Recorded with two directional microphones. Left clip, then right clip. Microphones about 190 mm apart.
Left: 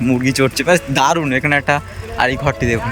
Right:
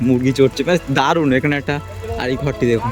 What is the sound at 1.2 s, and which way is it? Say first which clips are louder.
Speech: left 1 dB; 15° right (ahead or behind).